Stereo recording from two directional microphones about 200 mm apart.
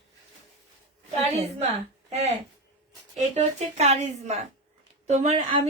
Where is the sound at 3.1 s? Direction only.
35° right (ahead or behind).